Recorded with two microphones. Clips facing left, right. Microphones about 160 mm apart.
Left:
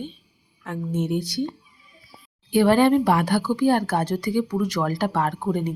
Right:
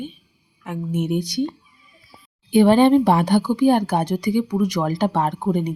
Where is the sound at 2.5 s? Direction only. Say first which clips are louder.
Right 3 dB; 20° right (ahead or behind).